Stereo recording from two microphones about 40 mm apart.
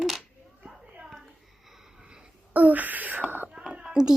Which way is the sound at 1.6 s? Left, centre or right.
Centre.